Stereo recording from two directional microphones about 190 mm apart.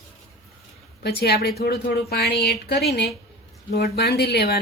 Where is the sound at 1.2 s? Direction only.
55° left (ahead or behind).